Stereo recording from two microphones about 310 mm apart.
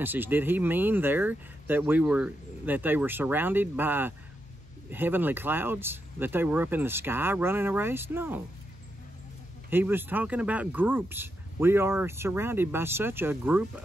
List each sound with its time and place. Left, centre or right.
0.0 s speech: centre
9.7 s speech: centre